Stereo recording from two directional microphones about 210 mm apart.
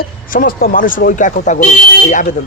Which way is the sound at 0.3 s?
45° left (ahead or behind).